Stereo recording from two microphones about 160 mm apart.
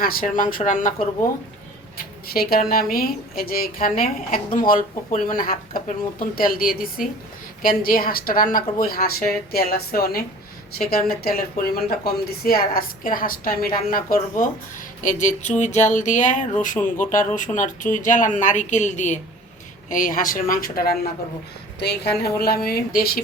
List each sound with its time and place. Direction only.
0.0 s speech: 65° left (ahead or behind)
2.3 s a woman's voice: 70° left (ahead or behind)
21.8 s a woman's voice: 90° left
22.2 s a woman's voice: 75° left (ahead or behind)